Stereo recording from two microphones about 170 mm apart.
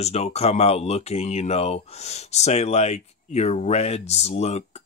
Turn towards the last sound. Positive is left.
turn(degrees=40)  # may be behind; listen again after turning